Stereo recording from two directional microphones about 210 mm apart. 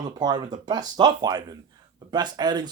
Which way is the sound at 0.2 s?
20° right (ahead or behind).